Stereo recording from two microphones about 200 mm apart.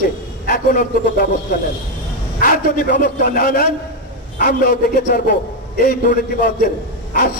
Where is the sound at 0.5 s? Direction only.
45° left (ahead or behind).